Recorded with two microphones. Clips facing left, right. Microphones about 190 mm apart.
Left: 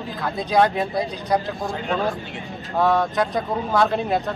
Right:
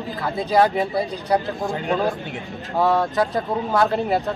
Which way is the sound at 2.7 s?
10° right (ahead or behind).